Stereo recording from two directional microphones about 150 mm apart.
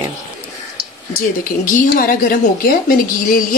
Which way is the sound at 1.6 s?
65° left (ahead or behind).